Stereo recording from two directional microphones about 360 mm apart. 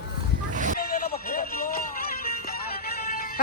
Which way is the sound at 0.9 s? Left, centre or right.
Left.